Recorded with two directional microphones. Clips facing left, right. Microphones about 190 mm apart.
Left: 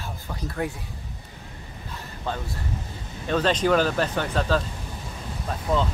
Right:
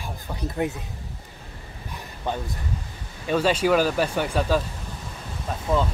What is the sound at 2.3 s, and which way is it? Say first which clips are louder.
Speech: right 2 dB; 15° right (ahead or behind).